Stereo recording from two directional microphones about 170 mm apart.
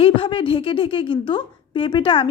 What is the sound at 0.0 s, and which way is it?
A woman's voice, 30° left (ahead or behind).